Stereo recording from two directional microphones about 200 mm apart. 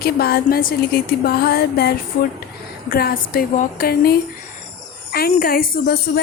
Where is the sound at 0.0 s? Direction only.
50° left (ahead or behind).